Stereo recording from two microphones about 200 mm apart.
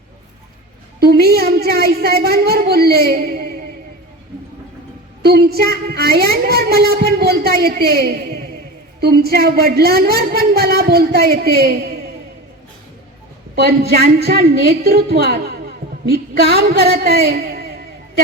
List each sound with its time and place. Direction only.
0.9 s speech: 50° right (ahead or behind)
5.2 s speech: 50° right (ahead or behind)
13.6 s speech: 55° right (ahead or behind)